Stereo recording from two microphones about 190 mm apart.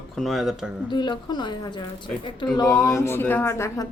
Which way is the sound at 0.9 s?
25° left (ahead or behind).